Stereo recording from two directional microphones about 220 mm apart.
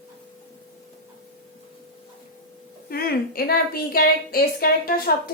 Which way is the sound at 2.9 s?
45° left (ahead or behind).